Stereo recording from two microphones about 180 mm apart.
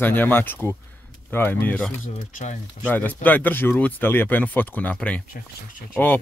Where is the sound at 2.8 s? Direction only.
10° left (ahead or behind).